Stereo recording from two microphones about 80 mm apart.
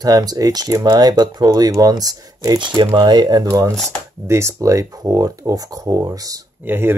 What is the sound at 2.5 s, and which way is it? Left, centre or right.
Speech, right.